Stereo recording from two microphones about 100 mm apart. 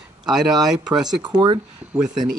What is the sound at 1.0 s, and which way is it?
Speech, 50° right (ahead or behind).